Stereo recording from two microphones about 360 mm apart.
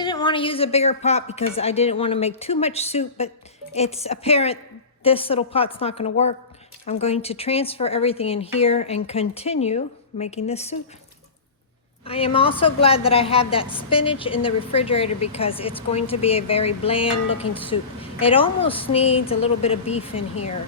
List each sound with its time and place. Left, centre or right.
0.0 s a woman's voice: centre
12.0 s a woman's voice: centre